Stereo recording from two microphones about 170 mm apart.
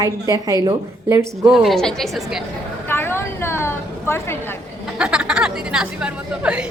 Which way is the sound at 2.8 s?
15° left (ahead or behind).